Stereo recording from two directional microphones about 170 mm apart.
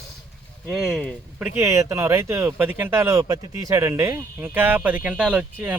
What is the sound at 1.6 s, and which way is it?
Speech, 15° right (ahead or behind).